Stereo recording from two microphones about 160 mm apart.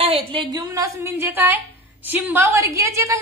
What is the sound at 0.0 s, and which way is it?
A woman's voice, 35° right (ahead or behind).